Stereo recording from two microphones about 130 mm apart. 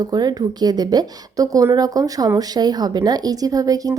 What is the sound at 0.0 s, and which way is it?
A woman's voice, 30° right (ahead or behind).